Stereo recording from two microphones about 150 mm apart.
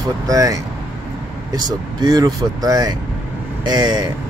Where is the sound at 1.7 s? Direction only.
25° right (ahead or behind).